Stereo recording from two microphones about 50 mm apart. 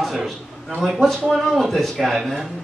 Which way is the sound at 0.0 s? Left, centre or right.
Centre.